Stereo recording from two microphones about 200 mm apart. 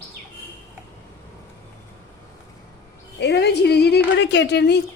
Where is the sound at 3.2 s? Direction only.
55° left (ahead or behind).